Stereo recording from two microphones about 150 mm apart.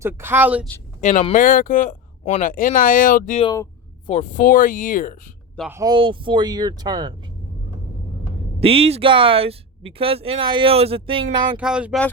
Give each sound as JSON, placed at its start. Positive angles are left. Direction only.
{"t": 0.0, "sound": "speech", "side_deg": -15}
{"t": 1.3, "sound": "speech", "side_deg": 65}
{"t": 2.5, "sound": "speech", "side_deg": 65}
{"t": 3.5, "sound": "a sound", "side_deg": 25}
{"t": 4.1, "sound": "speech", "side_deg": 55}
{"t": 5.8, "sound": "speech", "side_deg": -30}
{"t": 8.6, "sound": "speech", "side_deg": -40}
{"t": 11.5, "sound": "speech", "side_deg": -5}